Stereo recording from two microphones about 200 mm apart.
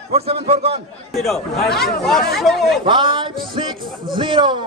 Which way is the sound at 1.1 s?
Centre (ahead or behind).